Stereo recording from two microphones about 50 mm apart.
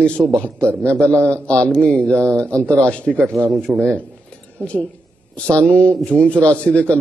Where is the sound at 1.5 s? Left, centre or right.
Left.